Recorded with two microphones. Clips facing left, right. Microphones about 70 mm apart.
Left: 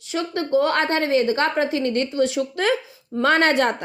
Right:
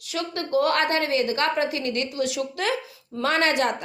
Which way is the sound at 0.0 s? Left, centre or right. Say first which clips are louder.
Left 4 dB; left.